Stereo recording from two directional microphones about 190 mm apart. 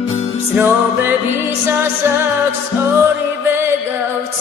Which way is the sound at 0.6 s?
10° right (ahead or behind).